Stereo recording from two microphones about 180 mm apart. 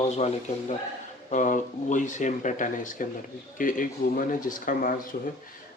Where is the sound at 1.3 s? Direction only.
45° left (ahead or behind).